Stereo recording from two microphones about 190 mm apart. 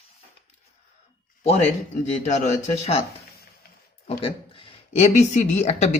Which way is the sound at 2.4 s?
30° left (ahead or behind).